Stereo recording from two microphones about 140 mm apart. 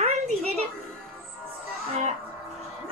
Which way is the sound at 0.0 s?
45° right (ahead or behind).